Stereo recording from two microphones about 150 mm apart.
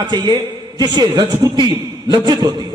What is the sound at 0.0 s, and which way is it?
A man's voice, 30° right (ahead or behind).